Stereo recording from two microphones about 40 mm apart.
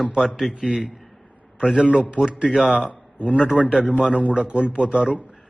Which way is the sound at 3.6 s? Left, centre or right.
Right.